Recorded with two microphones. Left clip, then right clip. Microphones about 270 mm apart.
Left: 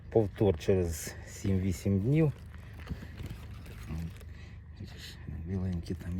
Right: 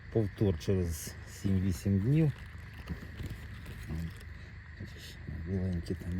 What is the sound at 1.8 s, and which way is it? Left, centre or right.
Speech, left.